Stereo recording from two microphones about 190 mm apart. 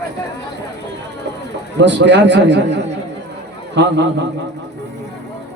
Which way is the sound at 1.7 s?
70° right (ahead or behind).